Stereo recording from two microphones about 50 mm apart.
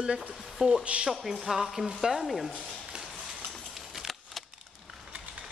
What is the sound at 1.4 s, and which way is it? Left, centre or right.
Speech, centre.